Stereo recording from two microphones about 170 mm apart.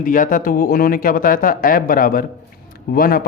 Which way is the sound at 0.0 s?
50° left (ahead or behind).